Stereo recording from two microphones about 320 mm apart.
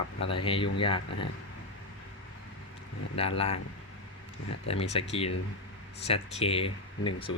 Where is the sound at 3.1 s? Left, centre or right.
Centre.